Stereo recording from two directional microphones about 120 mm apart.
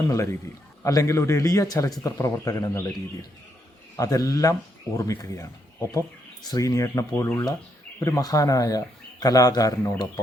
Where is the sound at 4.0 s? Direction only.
30° left (ahead or behind).